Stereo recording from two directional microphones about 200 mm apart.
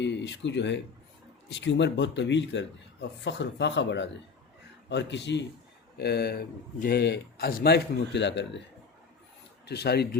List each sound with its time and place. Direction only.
0.0 s a man's voice: 60° left (ahead or behind)
9.6 s a man's voice: 55° left (ahead or behind)